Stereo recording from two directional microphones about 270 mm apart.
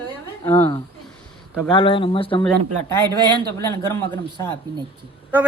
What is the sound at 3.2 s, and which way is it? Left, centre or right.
Speech, centre.